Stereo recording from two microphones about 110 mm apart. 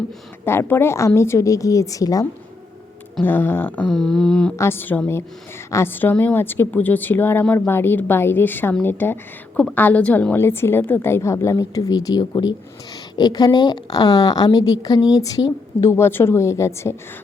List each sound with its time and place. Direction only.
0.4 s a woman's voice: 20° left (ahead or behind)
3.2 s speech: 20° left (ahead or behind)
4.5 s a woman's voice: 25° left (ahead or behind)
15.9 s a woman's voice: 20° left (ahead or behind)